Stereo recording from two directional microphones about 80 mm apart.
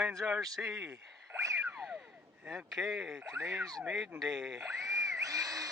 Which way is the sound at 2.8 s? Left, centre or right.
Centre.